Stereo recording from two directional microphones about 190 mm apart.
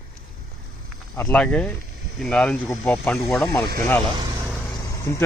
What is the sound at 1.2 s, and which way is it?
Speech, 5° left (ahead or behind).